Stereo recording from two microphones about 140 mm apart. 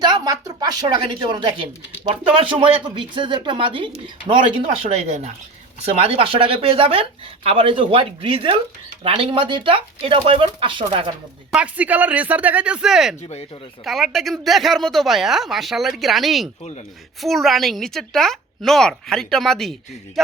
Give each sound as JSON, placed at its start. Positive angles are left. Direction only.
{"t": 0.0, "sound": "a sound", "side_deg": -30}
{"t": 2.0, "sound": "speech", "side_deg": -35}
{"t": 11.5, "sound": "speech", "side_deg": -10}
{"t": 13.2, "sound": "speech", "side_deg": 45}
{"t": 13.8, "sound": "a woman's voice", "side_deg": 0}